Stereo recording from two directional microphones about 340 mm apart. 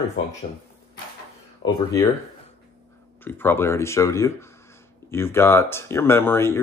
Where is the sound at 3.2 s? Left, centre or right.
Centre.